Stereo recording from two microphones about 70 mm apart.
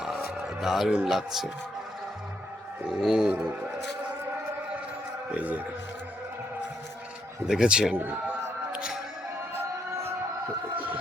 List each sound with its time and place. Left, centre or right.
0.3 s speech: centre
3.0 s speech: centre
5.3 s speech: right
7.4 s speech: centre
7.9 s a man's voice: right
8.7 s music: centre
10.8 s speech: right